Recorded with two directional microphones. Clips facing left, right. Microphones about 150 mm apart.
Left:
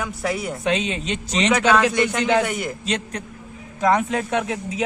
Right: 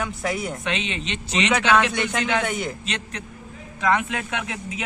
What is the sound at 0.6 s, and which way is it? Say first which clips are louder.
Speech: left 5 dB; 40° left (ahead or behind).